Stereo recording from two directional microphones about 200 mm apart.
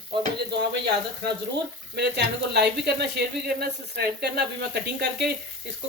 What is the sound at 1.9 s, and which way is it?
Speech, 55° right (ahead or behind).